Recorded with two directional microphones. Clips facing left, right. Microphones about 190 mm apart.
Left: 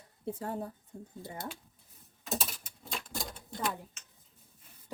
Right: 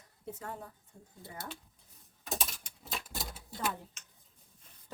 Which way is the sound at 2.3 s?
Centre (ahead or behind).